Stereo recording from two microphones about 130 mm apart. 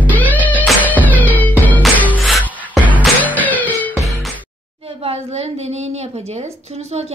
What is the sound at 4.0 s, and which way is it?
Music, centre (ahead or behind).